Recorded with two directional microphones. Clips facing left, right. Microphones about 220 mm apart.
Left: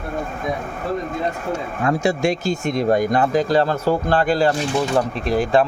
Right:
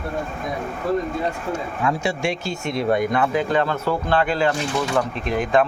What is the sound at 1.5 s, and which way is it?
Speech, 40° left (ahead or behind).